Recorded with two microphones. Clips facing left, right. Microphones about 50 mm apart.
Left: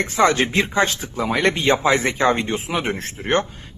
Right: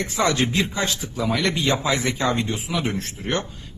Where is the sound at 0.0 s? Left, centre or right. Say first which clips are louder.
Left 4 dB; left.